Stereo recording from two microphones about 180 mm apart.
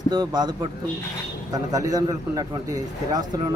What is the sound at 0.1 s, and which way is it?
A man's voice, 25° right (ahead or behind).